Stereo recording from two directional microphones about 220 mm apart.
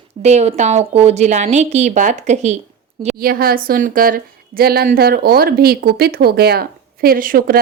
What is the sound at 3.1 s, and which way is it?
A woman's voice, 40° right (ahead or behind).